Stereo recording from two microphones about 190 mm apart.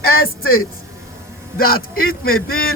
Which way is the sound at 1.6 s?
50° left (ahead or behind).